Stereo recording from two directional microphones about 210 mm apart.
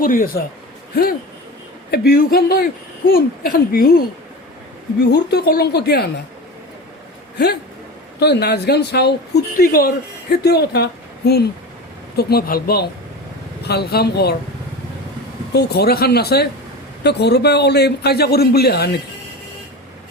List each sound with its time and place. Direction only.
0.0 s a man's voice: 40° left (ahead or behind)
1.9 s speech: 45° left (ahead or behind)
5.1 s speech: 50° left (ahead or behind)
8.2 s speech: 50° left (ahead or behind)
15.5 s speech: 50° left (ahead or behind)